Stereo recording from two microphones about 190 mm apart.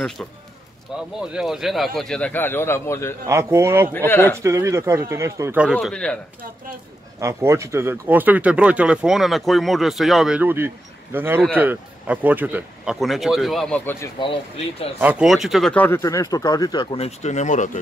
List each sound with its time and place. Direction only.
0.2 s speech: 5° left (ahead or behind)
0.9 s speech: 5° right (ahead or behind); by 3.2 s 15° left (ahead or behind)
3.3 s speech: 15° right (ahead or behind)
3.9 s speech: 10° left (ahead or behind)
4.4 s speech: 15° right (ahead or behind)
5.7 s speech: centre (ahead or behind)
7.2 s speech: 15° right (ahead or behind); by 14.1 s 15° left (ahead or behind)
14.2 s speech: 25° left (ahead or behind)
15.0 s speech: 5° right (ahead or behind); by 17.6 s 40° left (ahead or behind)